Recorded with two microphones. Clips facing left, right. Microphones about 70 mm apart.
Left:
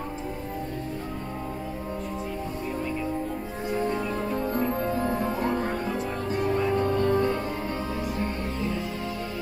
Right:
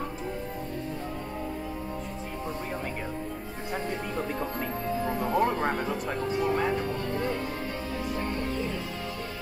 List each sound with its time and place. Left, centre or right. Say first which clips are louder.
5.4 s music: right 1 dB; right
6.3 s music: left 2 dB; left